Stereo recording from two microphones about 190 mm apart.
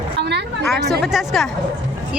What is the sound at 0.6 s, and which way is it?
Speech, centre (ahead or behind).